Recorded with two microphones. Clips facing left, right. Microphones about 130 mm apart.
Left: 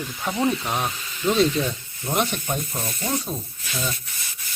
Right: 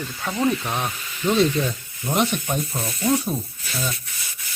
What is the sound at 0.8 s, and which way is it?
Speech, centre (ahead or behind).